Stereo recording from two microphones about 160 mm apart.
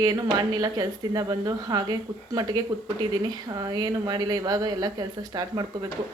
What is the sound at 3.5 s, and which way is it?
Speech, 25° right (ahead or behind).